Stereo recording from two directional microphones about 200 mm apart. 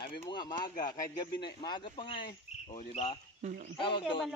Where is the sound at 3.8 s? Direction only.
25° left (ahead or behind).